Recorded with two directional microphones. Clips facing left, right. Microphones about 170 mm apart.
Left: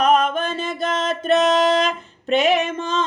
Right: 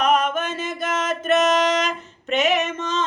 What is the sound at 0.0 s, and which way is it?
Mantra, 35° left (ahead or behind).